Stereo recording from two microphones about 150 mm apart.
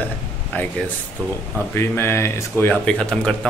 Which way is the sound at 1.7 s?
15° left (ahead or behind).